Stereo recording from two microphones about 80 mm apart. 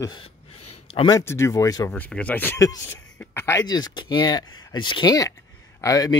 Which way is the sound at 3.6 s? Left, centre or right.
Left.